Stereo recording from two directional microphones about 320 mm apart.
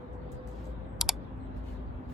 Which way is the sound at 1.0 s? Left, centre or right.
Centre.